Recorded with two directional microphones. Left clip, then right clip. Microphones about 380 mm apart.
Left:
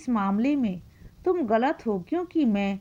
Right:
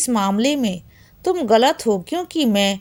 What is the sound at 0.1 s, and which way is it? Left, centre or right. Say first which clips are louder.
A woman's voice: right 6 dB; centre.